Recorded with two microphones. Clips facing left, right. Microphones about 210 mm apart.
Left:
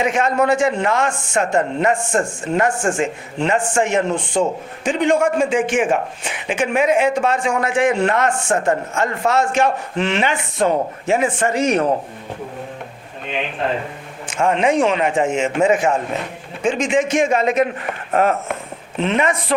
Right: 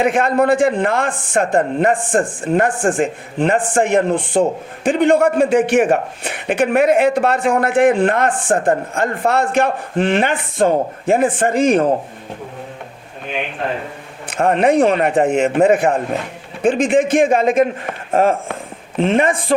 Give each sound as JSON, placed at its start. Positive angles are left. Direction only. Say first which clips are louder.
{"t": 0.0, "sound": "speech", "louder": "right 3 dB", "side_deg": -60}
{"t": 11.6, "sound": "speech", "louder": "right 4 dB", "side_deg": -30}
{"t": 14.3, "sound": "speech", "louder": "right 3 dB", "side_deg": -60}
{"t": 18.9, "sound": "speech", "louder": "right 3 dB", "side_deg": -50}